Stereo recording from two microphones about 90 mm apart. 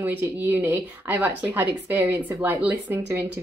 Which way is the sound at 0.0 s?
20° right (ahead or behind).